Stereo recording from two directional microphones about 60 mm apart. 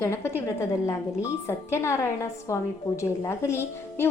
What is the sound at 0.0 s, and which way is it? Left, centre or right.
A woman's voice, left.